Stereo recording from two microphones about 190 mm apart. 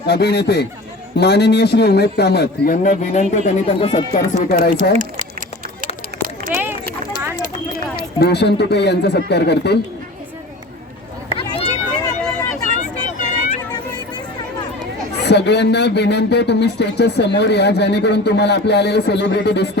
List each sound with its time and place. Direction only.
0.0 s speech: 60° left (ahead or behind)
2.8 s speech: 40° left (ahead or behind)
6.5 s a sound: 10° right (ahead or behind)
7.9 s speech: 60° left (ahead or behind)
12.2 s vehicle: 15° left (ahead or behind)
12.6 s vehicle: 40° left (ahead or behind)
15.2 s speech: 60° left (ahead or behind)